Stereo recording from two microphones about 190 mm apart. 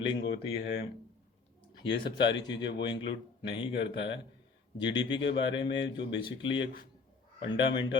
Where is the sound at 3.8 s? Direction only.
70° left (ahead or behind).